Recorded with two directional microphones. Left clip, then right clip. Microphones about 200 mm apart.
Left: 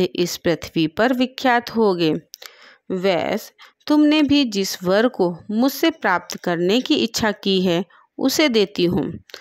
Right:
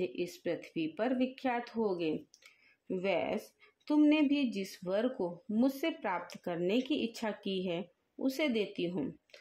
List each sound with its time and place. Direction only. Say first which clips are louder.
0.0 s speech: left 16 dB; 50° left (ahead or behind)